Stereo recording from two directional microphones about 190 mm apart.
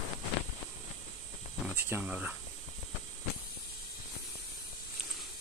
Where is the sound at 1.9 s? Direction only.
10° right (ahead or behind).